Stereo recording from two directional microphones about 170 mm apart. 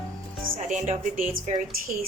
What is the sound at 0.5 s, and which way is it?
A woman's voice, 45° right (ahead or behind).